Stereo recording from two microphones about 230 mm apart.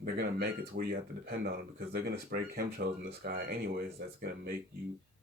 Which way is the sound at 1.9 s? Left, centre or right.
Right.